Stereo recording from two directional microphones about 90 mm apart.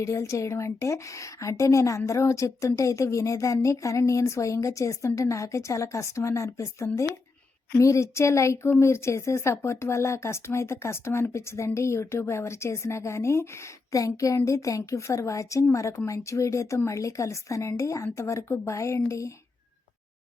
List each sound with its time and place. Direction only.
0.0 s a woman's voice: 35° left (ahead or behind)